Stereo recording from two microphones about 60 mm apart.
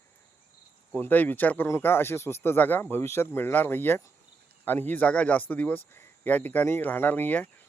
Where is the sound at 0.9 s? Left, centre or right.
Left.